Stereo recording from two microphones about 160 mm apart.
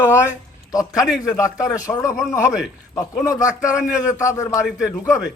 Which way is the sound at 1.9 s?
20° left (ahead or behind).